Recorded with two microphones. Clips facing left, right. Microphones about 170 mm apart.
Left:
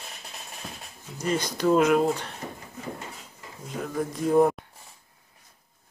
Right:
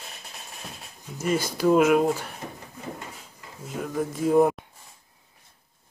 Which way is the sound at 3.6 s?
5° right (ahead or behind).